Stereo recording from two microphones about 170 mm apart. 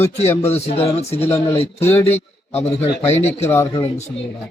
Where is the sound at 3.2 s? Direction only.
15° left (ahead or behind).